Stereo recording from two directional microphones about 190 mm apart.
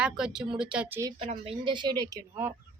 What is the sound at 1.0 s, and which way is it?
Speech, 20° right (ahead or behind).